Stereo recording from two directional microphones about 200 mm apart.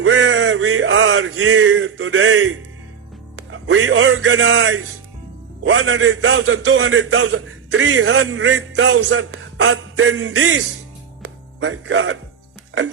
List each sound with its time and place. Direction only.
0.0 s a sound: 65° right (ahead or behind); by 2.6 s 90° right
3.3 s a man's voice: 75° right (ahead or behind); by 4.8 s 90° right
5.6 s a man's voice: 65° right (ahead or behind); by 10.6 s 90° right
11.2 s music: 90° right; by 12.1 s 75° right (ahead or behind)